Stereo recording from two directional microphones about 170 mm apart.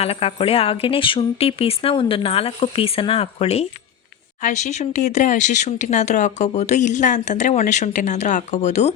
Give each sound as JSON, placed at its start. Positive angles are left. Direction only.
{"t": 0.0, "sound": "speech", "side_deg": 35}